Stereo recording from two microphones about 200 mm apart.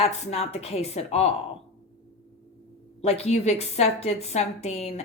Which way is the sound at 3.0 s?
30° left (ahead or behind).